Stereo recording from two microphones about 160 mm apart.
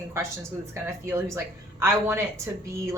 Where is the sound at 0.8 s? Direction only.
15° right (ahead or behind).